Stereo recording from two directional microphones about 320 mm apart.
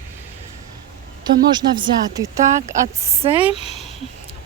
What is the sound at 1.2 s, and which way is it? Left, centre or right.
Speech, centre.